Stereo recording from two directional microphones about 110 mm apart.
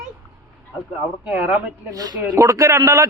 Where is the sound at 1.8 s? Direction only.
35° right (ahead or behind).